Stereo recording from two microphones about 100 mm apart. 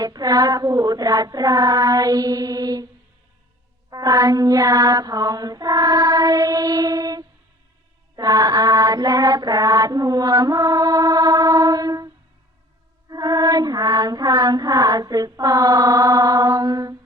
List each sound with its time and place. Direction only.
0.0 s child singing: 40° right (ahead or behind)
3.8 s child singing: 40° right (ahead or behind)
8.1 s mantra: 45° right (ahead or behind)
13.1 s female singing: 40° right (ahead or behind)